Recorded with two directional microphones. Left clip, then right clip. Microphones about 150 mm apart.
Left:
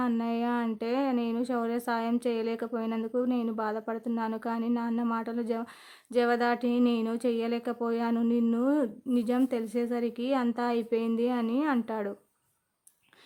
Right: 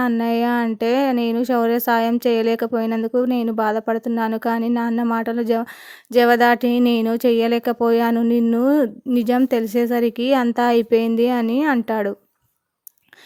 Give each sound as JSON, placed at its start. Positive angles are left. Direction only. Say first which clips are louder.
{"t": 0.2, "sound": "speech", "louder": "right 11 dB", "side_deg": -45}